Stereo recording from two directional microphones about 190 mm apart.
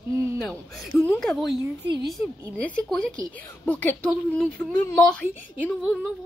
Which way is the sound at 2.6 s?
5° left (ahead or behind).